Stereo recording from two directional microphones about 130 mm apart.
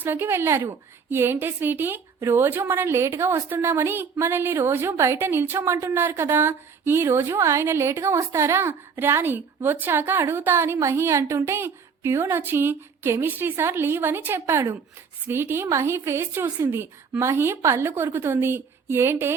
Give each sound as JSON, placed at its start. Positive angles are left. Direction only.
{"t": 0.0, "sound": "a woman's voice", "side_deg": -15}